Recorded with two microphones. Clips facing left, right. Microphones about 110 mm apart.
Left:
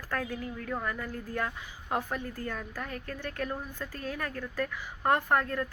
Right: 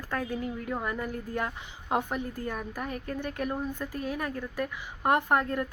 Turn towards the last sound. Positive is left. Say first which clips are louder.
# right 1 dB
turn(degrees=-20)  # may be behind; listen again after turning